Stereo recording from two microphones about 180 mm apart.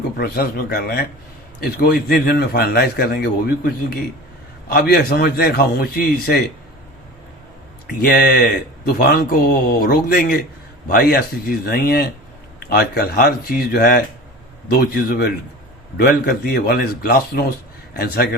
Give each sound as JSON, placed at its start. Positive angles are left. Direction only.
{"t": 0.2, "sound": "a man's voice", "side_deg": 60}
{"t": 8.0, "sound": "a man's voice", "side_deg": 60}